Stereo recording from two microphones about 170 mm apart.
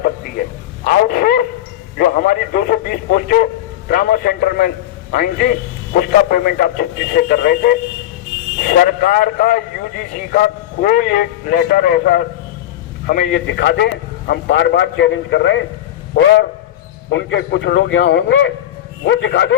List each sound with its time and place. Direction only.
0.9 s dog: 60° left (ahead or behind)
2.0 s a man's voice: 60° left (ahead or behind)
13.5 s a man's voice: 90° left
17.1 s a man's voice: 90° left